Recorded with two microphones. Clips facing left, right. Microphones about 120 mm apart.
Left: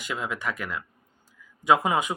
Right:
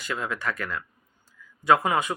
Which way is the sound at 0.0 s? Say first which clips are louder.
Right 1 dB; 15° left (ahead or behind).